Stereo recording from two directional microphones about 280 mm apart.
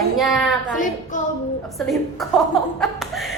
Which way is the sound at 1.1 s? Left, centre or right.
Left.